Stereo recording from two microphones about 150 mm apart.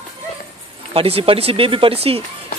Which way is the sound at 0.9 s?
40° right (ahead or behind).